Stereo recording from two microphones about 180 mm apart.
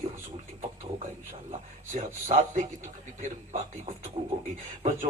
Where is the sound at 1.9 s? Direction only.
40° right (ahead or behind).